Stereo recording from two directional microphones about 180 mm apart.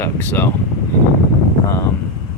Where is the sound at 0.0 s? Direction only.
10° left (ahead or behind).